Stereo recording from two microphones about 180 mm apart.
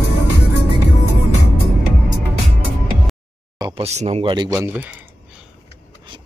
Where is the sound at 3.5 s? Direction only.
25° right (ahead or behind).